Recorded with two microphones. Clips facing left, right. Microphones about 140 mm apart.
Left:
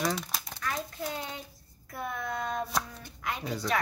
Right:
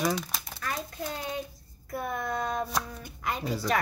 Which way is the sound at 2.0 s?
40° right (ahead or behind).